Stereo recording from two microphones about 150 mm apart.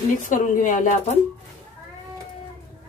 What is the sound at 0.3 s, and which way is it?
Speech, 60° left (ahead or behind).